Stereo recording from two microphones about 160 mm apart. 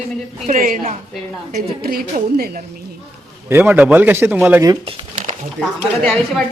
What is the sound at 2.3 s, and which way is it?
Speech, 75° right (ahead or behind).